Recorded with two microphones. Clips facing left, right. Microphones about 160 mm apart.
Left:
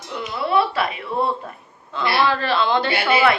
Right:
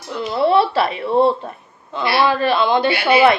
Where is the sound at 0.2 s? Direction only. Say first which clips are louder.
Right 5 dB; 30° right (ahead or behind).